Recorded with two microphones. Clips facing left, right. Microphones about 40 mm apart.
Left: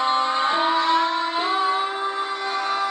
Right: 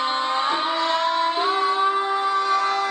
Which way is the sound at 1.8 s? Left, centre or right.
Centre.